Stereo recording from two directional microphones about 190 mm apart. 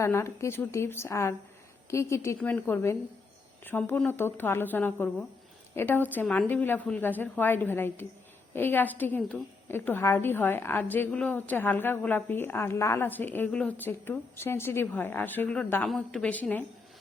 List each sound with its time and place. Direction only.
0.0 s a woman's voice: 15° left (ahead or behind)